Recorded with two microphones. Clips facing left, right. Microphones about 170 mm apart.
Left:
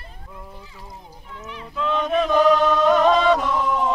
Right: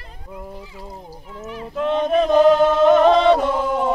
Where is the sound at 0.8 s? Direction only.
35° right (ahead or behind).